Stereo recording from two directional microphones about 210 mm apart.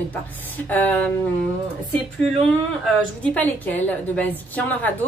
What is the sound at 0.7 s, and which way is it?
Speech, 5° left (ahead or behind).